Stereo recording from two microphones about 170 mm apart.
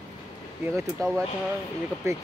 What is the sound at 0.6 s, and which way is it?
Speech, 15° right (ahead or behind).